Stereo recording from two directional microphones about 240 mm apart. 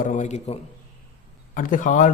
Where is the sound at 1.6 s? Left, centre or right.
Left.